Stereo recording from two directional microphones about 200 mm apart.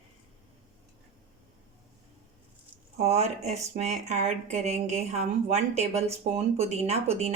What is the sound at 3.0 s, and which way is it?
Speech, 35° right (ahead or behind).